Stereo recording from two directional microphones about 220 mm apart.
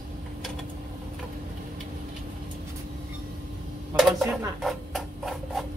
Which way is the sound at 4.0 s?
Centre (ahead or behind).